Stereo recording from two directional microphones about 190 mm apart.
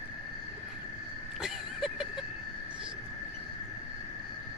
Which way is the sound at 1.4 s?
Centre (ahead or behind).